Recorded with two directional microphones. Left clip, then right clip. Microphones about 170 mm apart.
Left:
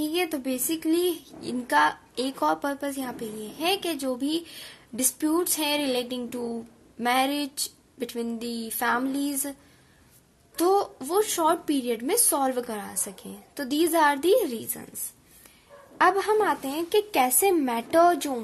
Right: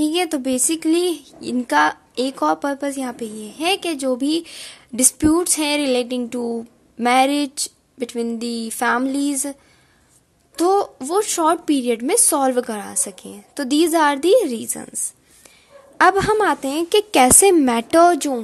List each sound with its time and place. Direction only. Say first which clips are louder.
0.0 s a woman's voice: right 7 dB; 40° right (ahead or behind)
16.0 s a woman's voice: right 7 dB; 40° right (ahead or behind)